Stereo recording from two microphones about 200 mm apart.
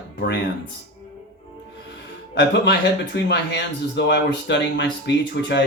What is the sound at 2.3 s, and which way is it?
Speech, 60° left (ahead or behind).